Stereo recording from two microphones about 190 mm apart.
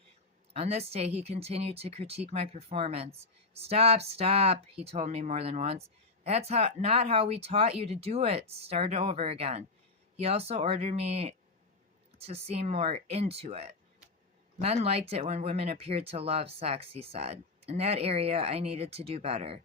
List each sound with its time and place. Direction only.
0.5 s speech: 35° right (ahead or behind)